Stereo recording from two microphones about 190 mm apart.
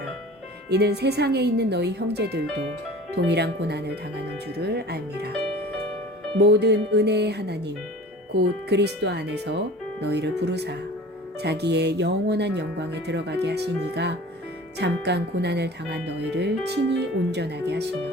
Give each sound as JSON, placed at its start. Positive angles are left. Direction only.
{"t": 0.7, "sound": "speech", "side_deg": -60}
{"t": 6.4, "sound": "speech", "side_deg": -60}